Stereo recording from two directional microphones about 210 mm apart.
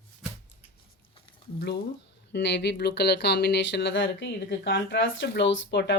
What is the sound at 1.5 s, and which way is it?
Speech, 50° left (ahead or behind).